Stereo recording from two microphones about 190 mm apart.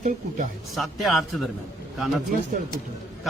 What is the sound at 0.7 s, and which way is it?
Speech, centre (ahead or behind).